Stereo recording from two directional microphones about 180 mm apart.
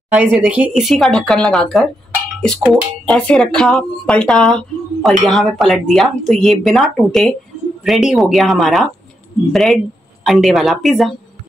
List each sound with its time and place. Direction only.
0.1 s speech: 10° right (ahead or behind)